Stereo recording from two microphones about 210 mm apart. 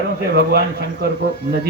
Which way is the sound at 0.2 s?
50° right (ahead or behind).